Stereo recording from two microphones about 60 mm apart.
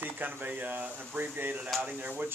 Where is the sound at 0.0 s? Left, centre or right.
Right.